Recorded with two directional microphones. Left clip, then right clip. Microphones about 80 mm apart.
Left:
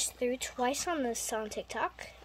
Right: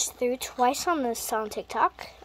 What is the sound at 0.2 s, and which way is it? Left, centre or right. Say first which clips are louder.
Speech: right 7 dB; right.